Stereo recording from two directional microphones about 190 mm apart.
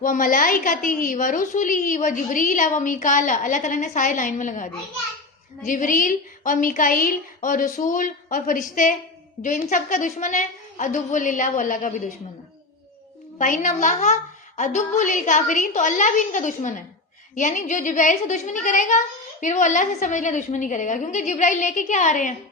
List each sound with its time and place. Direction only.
0.0 s a woman's voice: 45° left (ahead or behind)
13.4 s a woman's voice: 40° left (ahead or behind)